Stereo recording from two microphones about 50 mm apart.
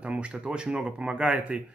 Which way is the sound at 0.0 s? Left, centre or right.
Right.